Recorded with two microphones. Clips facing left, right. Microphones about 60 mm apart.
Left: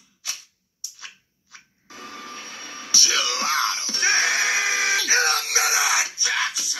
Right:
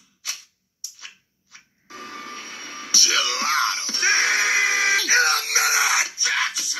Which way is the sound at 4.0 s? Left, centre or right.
Right.